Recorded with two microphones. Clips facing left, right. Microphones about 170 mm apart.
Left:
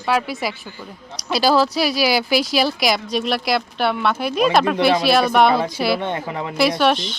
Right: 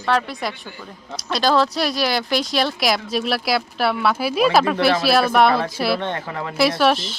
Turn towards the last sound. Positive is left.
turn(degrees=-5)  # may be behind; listen again after turning